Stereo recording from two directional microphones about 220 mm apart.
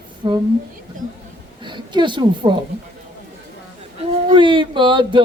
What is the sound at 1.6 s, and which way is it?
Speech, 20° right (ahead or behind).